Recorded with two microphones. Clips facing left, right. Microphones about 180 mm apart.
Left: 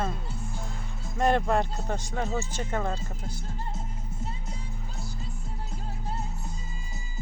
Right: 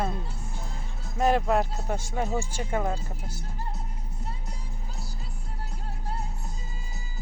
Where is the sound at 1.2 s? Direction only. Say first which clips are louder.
Right 1 dB; 5° right (ahead or behind).